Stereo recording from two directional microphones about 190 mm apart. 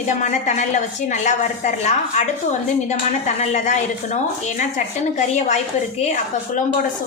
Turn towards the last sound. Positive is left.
turn(degrees=40)  # may be behind; listen again after turning